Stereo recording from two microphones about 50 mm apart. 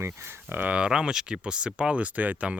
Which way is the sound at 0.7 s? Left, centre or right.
Centre.